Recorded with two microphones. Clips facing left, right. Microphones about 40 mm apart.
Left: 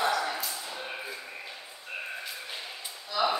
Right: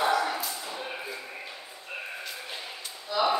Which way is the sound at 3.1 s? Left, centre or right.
Centre.